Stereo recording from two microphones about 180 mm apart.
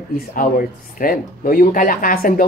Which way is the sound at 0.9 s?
50° left (ahead or behind).